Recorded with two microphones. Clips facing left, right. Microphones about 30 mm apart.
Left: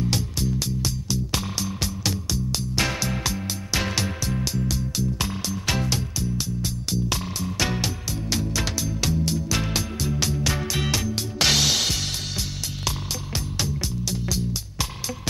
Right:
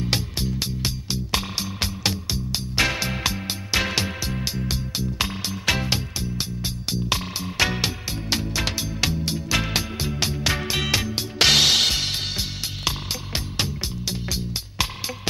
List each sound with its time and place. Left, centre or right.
0.0 s music: right